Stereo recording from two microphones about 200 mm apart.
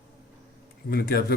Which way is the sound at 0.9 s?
50° left (ahead or behind).